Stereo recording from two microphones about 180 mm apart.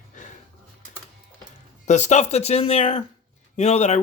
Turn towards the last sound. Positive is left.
turn(degrees=40)  # may be behind; listen again after turning